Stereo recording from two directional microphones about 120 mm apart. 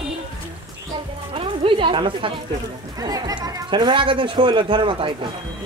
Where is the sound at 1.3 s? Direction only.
50° right (ahead or behind).